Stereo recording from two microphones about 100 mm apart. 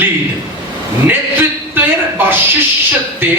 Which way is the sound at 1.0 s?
20° right (ahead or behind).